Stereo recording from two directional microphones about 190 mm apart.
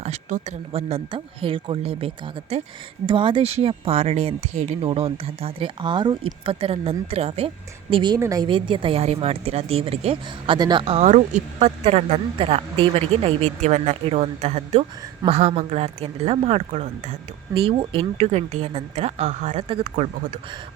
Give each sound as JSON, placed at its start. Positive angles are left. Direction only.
{"t": 0.0, "sound": "a woman's voice", "side_deg": -35}